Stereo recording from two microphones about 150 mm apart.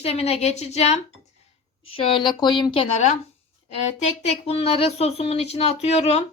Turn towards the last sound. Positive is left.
turn(degrees=45)  # may be behind; listen again after turning